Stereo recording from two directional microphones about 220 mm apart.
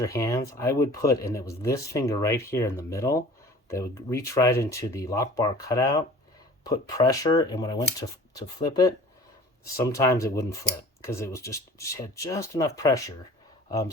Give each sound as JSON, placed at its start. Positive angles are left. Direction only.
{"t": 0.0, "sound": "speech", "side_deg": 15}